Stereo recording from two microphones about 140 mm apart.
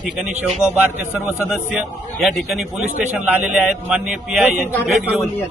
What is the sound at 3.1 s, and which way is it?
A man's voice, 10° right (ahead or behind).